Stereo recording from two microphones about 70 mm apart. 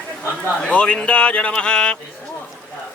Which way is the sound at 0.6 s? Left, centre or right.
Centre.